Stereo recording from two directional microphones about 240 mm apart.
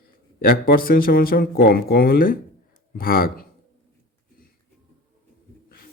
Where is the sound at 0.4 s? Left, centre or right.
Left.